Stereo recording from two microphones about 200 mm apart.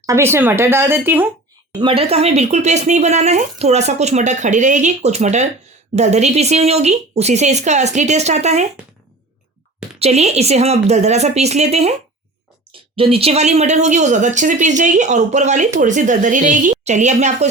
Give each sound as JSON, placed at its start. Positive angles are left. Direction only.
{"t": 0.0, "sound": "speech", "side_deg": -15}
{"t": 1.8, "sound": "a woman's voice", "side_deg": -25}
{"t": 10.0, "sound": "a woman's voice", "side_deg": -35}